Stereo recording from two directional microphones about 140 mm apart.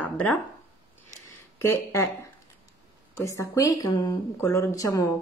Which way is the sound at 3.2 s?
20° left (ahead or behind).